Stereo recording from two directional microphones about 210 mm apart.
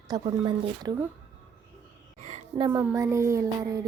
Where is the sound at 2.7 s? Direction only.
15° right (ahead or behind).